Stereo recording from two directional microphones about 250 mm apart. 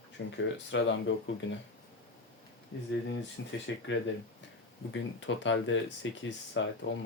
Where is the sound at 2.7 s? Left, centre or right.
Left.